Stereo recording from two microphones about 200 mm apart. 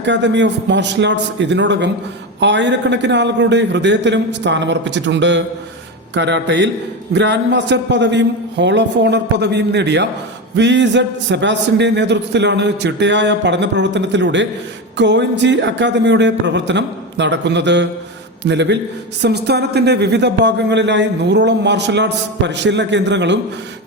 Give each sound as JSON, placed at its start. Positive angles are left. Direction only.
{"t": 0.0, "sound": "speech", "side_deg": -65}